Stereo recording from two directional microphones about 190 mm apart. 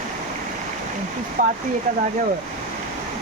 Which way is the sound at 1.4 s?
45° right (ahead or behind).